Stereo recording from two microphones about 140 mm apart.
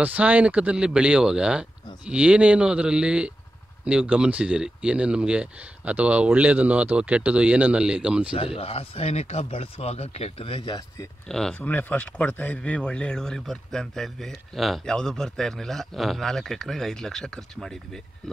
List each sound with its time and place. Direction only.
0.0 s speech: 10° right (ahead or behind)
8.4 s speech: 45° left (ahead or behind)
11.2 s speech: 5° left (ahead or behind)